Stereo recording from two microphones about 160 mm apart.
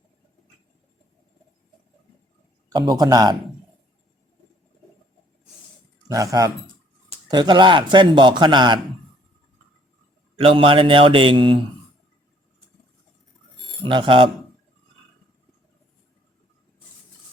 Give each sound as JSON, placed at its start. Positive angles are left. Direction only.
{"t": 2.6, "sound": "speech", "side_deg": -25}
{"t": 6.1, "sound": "speech", "side_deg": -20}
{"t": 10.3, "sound": "speech", "side_deg": -35}
{"t": 13.8, "sound": "speech", "side_deg": -30}